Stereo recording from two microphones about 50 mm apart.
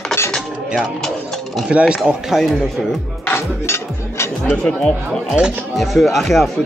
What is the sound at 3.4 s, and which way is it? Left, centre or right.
Music, left.